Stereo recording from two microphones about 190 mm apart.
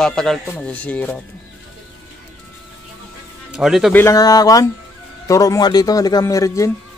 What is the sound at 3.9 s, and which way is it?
Speech, 15° left (ahead or behind).